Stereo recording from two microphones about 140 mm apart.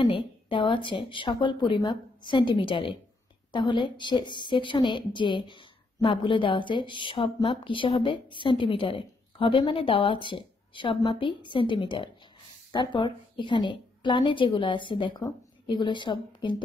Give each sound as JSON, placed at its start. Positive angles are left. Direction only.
{"t": 0.0, "sound": "a woman's voice", "side_deg": 40}